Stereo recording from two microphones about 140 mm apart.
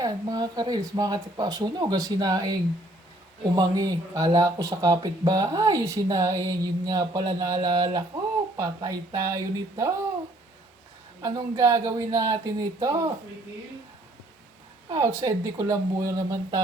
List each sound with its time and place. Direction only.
0.0 s speech: 25° right (ahead or behind)
11.2 s speech: 25° right (ahead or behind)
14.8 s speech: 20° right (ahead or behind)